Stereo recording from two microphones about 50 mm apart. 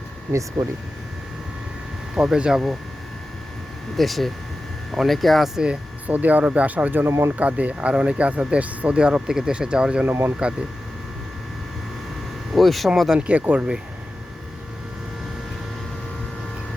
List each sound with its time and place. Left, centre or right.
0.3 s speech: right
2.1 s speech: centre
3.9 s speech: centre
6.1 s speech: right
7.0 s speech: right
7.3 s speech: right
9.0 s speech: centre
10.1 s speech: right
12.5 s speech: centre
13.1 s speech: right
13.4 s speech: right